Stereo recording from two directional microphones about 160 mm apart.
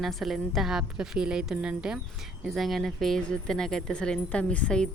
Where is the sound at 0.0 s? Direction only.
Centre (ahead or behind).